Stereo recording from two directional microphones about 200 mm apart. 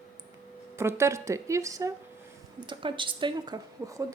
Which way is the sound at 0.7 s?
15° right (ahead or behind).